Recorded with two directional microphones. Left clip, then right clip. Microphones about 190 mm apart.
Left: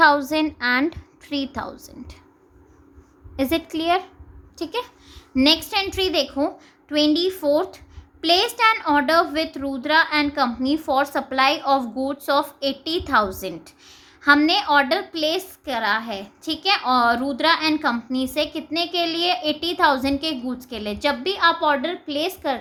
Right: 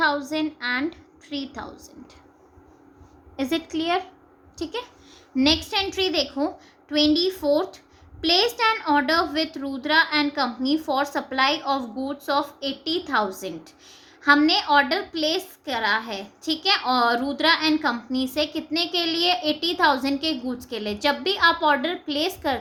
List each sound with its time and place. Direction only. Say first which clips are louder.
0.0 s a woman's voice: left 7 dB; 35° left (ahead or behind)
3.3 s a child's voice: left 3 dB; 25° left (ahead or behind)